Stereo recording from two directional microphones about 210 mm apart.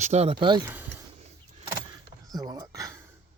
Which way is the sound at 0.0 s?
30° right (ahead or behind).